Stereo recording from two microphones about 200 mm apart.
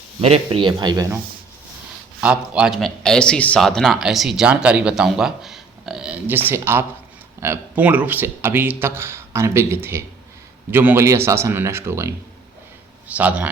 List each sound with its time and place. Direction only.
0.2 s speech: 30° right (ahead or behind)
2.2 s a man's voice: 5° right (ahead or behind)